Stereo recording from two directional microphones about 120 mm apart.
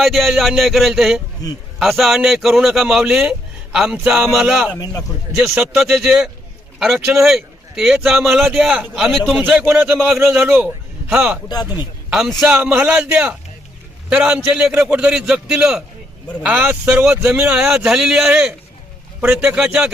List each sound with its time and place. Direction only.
0.0 s a man's voice: centre (ahead or behind)
1.4 s speech: 30° left (ahead or behind)
1.8 s a man's voice: centre (ahead or behind)
9.4 s a man's voice: 15° right (ahead or behind)
11.1 s a man's voice: 5° right (ahead or behind)